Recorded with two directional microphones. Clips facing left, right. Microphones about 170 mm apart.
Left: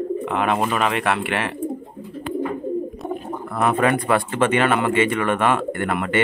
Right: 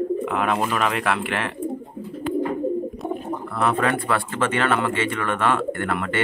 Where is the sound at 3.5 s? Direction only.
15° left (ahead or behind).